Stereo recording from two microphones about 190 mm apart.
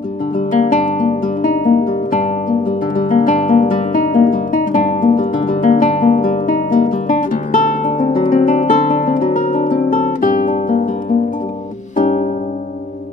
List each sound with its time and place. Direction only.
0.5 s music: 40° left (ahead or behind)
3.1 s guitar: 45° left (ahead or behind)